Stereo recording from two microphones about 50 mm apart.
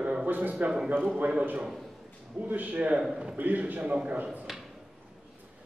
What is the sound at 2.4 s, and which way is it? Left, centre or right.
A man's voice, right.